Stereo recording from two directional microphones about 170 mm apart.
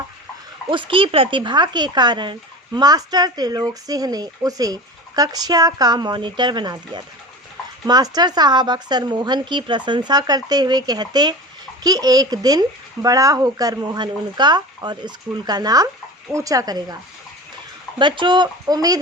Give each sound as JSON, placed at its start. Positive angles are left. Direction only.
{"t": 0.7, "sound": "speech", "side_deg": -30}